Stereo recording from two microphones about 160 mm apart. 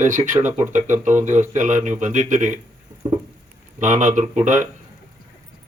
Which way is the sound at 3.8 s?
50° right (ahead or behind).